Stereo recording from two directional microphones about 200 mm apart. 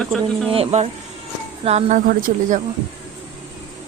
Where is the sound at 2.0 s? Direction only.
45° right (ahead or behind).